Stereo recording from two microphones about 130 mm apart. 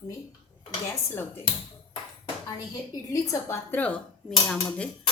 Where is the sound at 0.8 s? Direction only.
15° left (ahead or behind).